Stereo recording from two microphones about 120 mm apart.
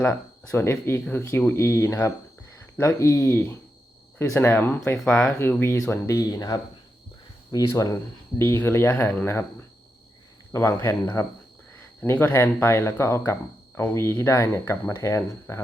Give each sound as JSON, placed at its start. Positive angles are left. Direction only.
{"t": 0.0, "sound": "speech", "side_deg": 20}
{"t": 5.4, "sound": "speech", "side_deg": 15}